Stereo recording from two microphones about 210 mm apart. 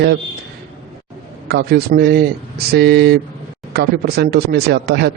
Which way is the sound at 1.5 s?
50° right (ahead or behind).